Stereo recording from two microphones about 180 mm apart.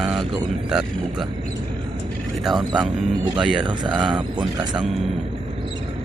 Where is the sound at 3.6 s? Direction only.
25° right (ahead or behind).